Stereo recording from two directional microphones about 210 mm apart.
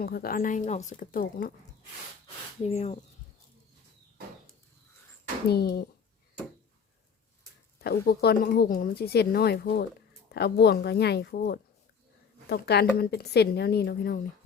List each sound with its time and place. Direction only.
0.0 s speech: 45° left (ahead or behind)
2.6 s speech: 30° left (ahead or behind)
5.5 s speech: 50° left (ahead or behind)
7.8 s speech: 50° left (ahead or behind)